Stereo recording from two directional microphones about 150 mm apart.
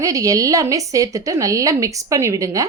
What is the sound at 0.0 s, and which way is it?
A woman's voice, 20° right (ahead or behind).